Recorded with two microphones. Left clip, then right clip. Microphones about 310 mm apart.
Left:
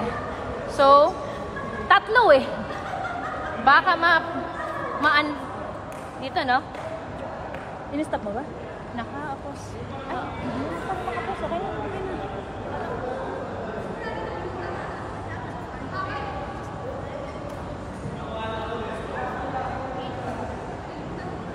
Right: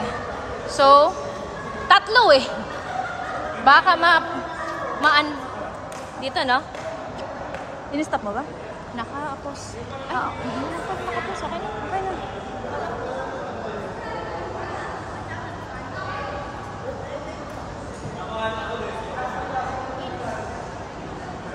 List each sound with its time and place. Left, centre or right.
0.7 s a woman's voice: centre
3.6 s a woman's voice: centre
7.9 s speech: centre